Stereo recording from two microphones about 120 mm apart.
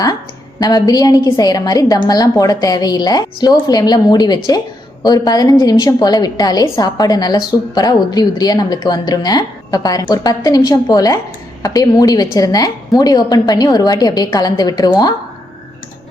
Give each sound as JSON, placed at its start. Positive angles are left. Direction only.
{"t": 0.6, "sound": "a woman's voice", "side_deg": 30}